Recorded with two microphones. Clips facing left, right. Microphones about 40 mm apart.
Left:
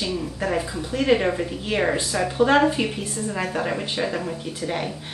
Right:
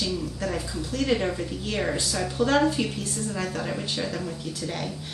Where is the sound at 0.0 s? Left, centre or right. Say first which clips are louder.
Left 3 dB; left.